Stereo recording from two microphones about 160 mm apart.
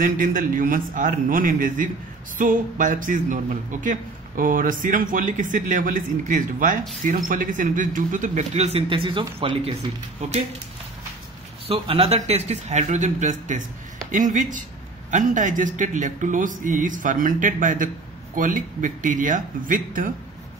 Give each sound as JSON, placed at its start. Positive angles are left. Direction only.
{"t": 0.0, "sound": "speech", "side_deg": -60}
{"t": 11.6, "sound": "speech", "side_deg": -35}